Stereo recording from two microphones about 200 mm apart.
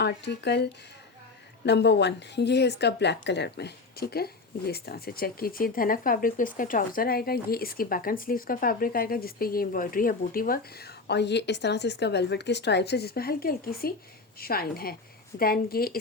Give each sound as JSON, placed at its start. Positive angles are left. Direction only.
{"t": 0.0, "sound": "speech", "side_deg": 60}